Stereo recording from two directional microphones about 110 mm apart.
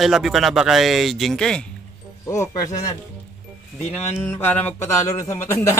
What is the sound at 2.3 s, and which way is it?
Speech, 30° left (ahead or behind).